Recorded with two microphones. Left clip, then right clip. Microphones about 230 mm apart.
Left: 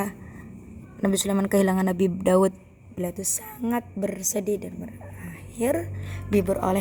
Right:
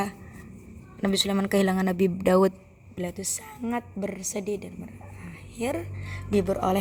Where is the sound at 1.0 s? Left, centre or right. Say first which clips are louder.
Left 1 dB; right.